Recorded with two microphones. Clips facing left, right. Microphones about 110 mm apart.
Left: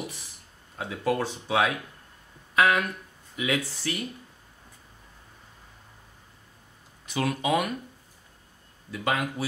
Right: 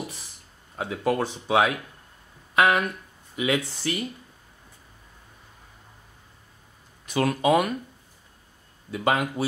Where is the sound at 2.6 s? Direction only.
35° right (ahead or behind).